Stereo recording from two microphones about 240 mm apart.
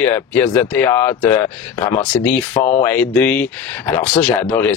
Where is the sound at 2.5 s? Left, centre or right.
Left.